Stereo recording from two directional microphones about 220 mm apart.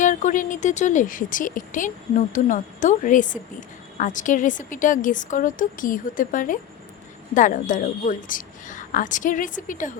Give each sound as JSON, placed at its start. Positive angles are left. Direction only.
{"t": 0.0, "sound": "speech", "side_deg": 35}